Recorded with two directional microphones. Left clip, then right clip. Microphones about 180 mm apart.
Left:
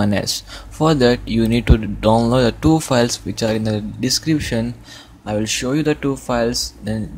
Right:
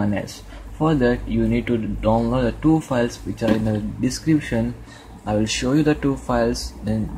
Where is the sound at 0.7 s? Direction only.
35° left (ahead or behind).